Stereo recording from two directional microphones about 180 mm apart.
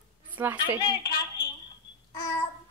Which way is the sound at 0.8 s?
20° left (ahead or behind).